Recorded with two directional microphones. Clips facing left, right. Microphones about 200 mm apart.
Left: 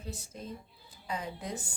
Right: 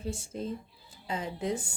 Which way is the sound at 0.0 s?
30° right (ahead or behind).